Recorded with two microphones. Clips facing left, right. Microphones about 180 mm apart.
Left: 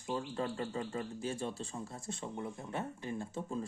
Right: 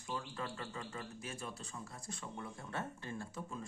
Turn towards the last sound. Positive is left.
turn(degrees=20)  # may be behind; listen again after turning